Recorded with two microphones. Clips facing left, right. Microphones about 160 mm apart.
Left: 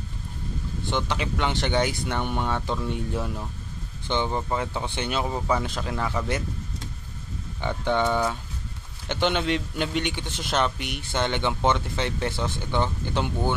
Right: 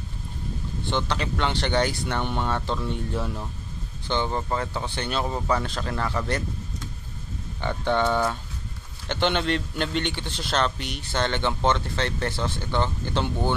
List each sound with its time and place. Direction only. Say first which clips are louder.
0.8 s speech: right 1 dB; 15° left (ahead or behind)
4.7 s speech: even; 20° left (ahead or behind)
7.6 s speech: even; 15° left (ahead or behind)